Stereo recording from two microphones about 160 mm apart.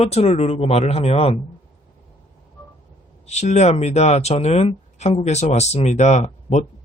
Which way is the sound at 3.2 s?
45° left (ahead or behind).